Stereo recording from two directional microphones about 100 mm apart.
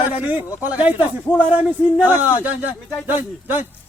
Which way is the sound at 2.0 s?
15° right (ahead or behind).